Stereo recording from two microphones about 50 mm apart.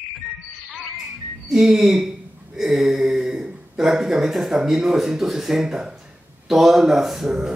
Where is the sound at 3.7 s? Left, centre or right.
Centre.